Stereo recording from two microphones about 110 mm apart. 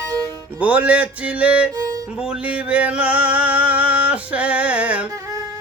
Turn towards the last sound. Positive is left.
turn(degrees=-10)  # may be behind; listen again after turning